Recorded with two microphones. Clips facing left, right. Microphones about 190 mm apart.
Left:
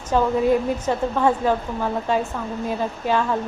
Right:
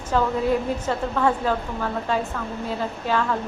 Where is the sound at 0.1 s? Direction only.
15° left (ahead or behind).